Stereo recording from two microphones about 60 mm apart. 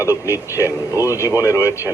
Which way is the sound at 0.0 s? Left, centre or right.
Left.